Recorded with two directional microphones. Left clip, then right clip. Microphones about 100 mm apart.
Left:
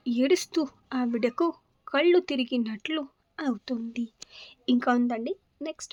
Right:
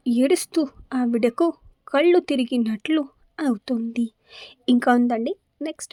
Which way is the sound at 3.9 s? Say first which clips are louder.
Right 8 dB; 65° right (ahead or behind).